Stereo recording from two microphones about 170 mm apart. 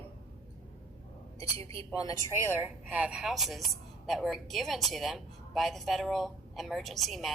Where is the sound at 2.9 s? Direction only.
5° right (ahead or behind).